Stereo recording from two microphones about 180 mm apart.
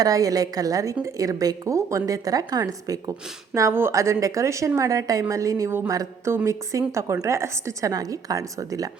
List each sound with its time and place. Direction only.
0.0 s a woman's voice: 20° right (ahead or behind)